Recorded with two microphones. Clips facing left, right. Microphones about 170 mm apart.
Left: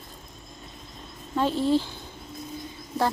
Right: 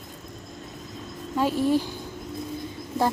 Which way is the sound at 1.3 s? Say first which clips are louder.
Right 1 dB; 10° right (ahead or behind).